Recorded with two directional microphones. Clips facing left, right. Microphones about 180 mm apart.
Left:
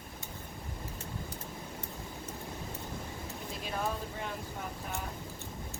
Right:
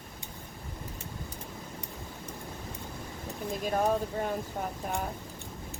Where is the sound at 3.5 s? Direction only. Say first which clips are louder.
Right 9 dB; 45° right (ahead or behind).